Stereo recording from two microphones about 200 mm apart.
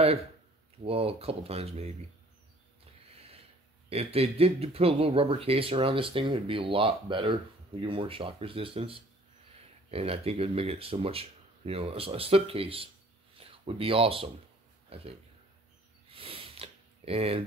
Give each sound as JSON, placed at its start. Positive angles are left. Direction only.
{"t": 0.8, "sound": "speech", "side_deg": -30}
{"t": 3.2, "sound": "a sound", "side_deg": -30}
{"t": 3.9, "sound": "speech", "side_deg": -30}
{"t": 16.1, "sound": "sniff", "side_deg": -30}